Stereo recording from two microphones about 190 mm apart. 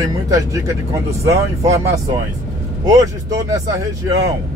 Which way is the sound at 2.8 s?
20° right (ahead or behind).